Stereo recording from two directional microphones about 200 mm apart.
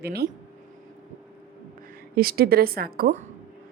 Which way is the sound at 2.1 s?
50° right (ahead or behind).